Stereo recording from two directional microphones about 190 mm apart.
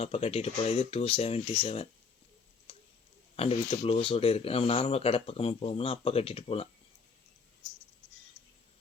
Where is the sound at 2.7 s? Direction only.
30° left (ahead or behind).